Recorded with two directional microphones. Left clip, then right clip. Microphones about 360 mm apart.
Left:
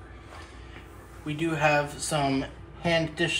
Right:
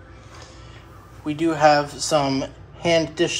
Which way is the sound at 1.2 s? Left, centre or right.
Centre.